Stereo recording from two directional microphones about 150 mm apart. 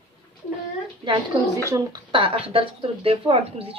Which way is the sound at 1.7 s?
30° right (ahead or behind).